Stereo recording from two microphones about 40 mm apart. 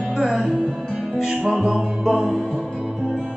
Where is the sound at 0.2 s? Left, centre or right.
Right.